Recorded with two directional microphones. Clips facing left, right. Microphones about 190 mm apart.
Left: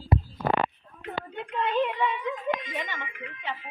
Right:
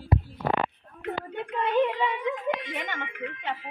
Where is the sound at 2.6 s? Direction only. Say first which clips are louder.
Right 1 dB; 60° right (ahead or behind).